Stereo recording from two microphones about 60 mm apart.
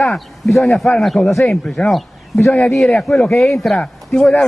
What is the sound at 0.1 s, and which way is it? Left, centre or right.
Speech, centre.